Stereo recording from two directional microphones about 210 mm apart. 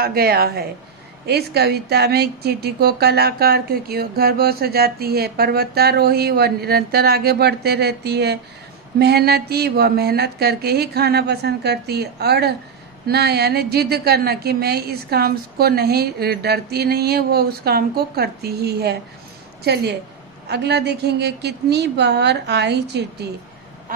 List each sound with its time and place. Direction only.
0.0 s speech: 45° right (ahead or behind)